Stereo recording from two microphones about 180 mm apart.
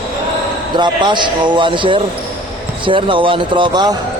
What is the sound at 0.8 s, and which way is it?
Speech, 25° right (ahead or behind).